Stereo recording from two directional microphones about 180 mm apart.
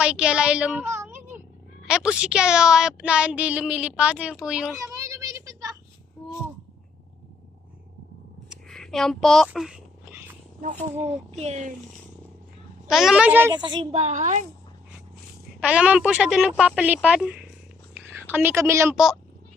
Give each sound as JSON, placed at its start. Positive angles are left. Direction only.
{"t": 0.0, "sound": "a woman's voice", "side_deg": -5}
{"t": 4.8, "sound": "a sound", "side_deg": -20}
{"t": 8.4, "sound": "a sound", "side_deg": 0}
{"t": 11.3, "sound": "a woman's voice", "side_deg": -35}
{"t": 12.9, "sound": "a woman's voice", "side_deg": 0}
{"t": 13.5, "sound": "a woman's voice", "side_deg": -25}
{"t": 13.9, "sound": "a woman's voice", "side_deg": -40}
{"t": 15.6, "sound": "a woman's voice", "side_deg": -5}
{"t": 17.9, "sound": "a sound", "side_deg": -10}